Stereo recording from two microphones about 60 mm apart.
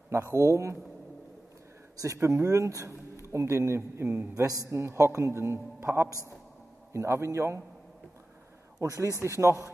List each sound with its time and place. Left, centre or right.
0.1 s a man's voice: right
2.2 s a man's voice: right
4.5 s a man's voice: right
8.7 s speech: right
9.2 s a man's voice: right